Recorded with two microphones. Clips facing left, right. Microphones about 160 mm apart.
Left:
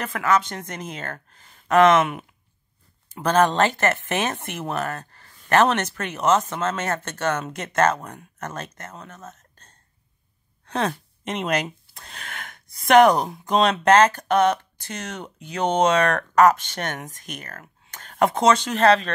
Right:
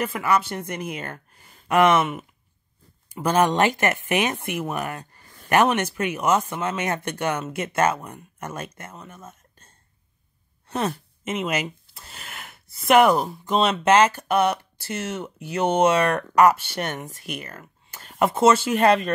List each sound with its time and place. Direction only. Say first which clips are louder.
0.0 s speech: even; 10° right (ahead or behind)
17.4 s speech: right 2 dB; 50° left (ahead or behind)
17.8 s speech: left 1 dB; 5° right (ahead or behind)